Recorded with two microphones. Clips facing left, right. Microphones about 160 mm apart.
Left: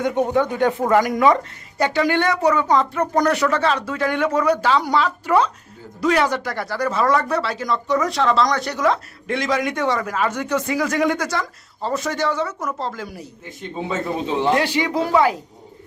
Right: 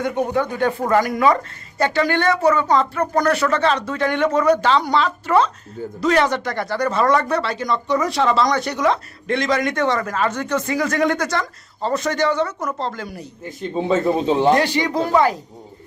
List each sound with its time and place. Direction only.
0.0 s speech: 20° left (ahead or behind); by 13.2 s 5° left (ahead or behind)
13.8 s speech: 35° right (ahead or behind)
14.5 s speech: 5° left (ahead or behind)